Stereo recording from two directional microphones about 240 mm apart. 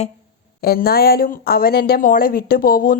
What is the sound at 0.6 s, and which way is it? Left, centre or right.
Speech, left.